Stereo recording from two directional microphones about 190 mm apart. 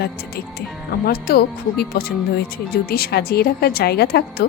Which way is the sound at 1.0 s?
55° left (ahead or behind).